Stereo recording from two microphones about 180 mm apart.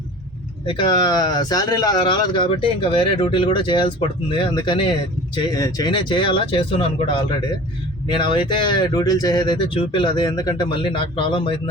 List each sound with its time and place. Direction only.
0.6 s speech: 30° left (ahead or behind)
8.0 s speech: 25° left (ahead or behind)